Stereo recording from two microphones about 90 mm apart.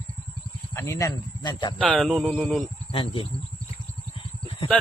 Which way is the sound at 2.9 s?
75° left (ahead or behind).